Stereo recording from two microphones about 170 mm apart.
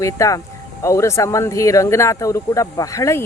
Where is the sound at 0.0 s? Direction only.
20° left (ahead or behind).